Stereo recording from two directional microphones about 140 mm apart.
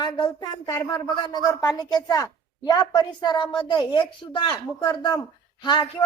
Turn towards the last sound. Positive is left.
turn(degrees=35)  # may be behind; listen again after turning